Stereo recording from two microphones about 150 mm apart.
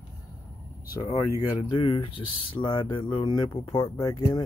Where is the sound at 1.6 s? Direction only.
35° left (ahead or behind).